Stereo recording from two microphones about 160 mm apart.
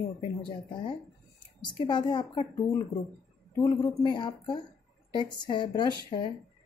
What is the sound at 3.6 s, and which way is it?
A woman's voice, 25° left (ahead or behind).